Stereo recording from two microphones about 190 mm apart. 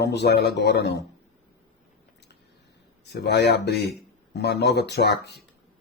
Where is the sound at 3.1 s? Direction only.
60° left (ahead or behind).